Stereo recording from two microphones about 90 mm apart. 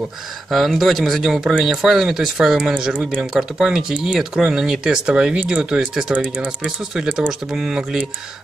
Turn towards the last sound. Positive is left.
turn(degrees=-5)  # may be behind; listen again after turning